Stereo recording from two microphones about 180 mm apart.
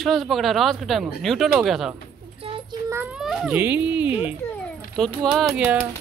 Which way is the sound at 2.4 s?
30° right (ahead or behind).